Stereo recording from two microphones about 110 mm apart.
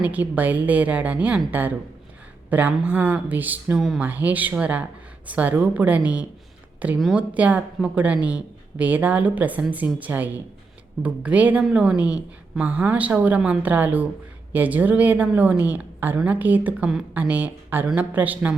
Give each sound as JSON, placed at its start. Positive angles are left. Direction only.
{"t": 0.0, "sound": "a woman's voice", "side_deg": -15}
{"t": 3.8, "sound": "speech", "side_deg": -5}
{"t": 4.0, "sound": "a woman's voice", "side_deg": -15}